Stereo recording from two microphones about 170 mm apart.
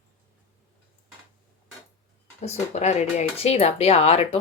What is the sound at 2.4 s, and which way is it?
Speech, 40° left (ahead or behind).